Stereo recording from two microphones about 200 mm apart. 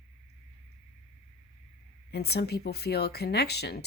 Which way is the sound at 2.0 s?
55° left (ahead or behind).